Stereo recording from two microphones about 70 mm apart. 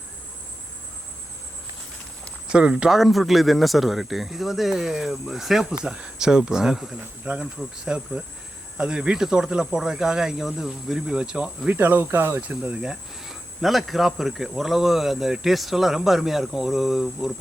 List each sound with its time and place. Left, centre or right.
2.5 s cricket: centre
5.8 s speech: centre
11.7 s speech: right
12.4 s cricket: centre